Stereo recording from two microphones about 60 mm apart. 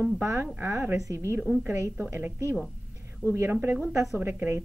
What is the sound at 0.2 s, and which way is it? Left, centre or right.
Speech, right.